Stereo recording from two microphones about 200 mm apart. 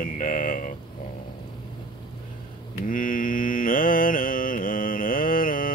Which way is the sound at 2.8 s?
40° left (ahead or behind).